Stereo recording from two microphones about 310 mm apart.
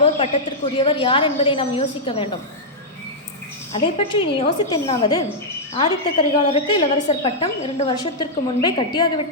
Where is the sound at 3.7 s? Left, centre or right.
Centre.